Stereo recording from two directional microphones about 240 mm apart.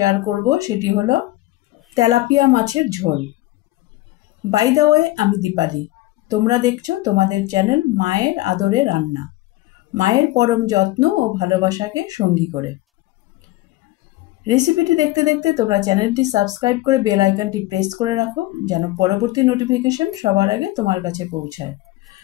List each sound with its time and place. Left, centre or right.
0.5 s speech: centre
4.5 s speech: centre
14.4 s speech: centre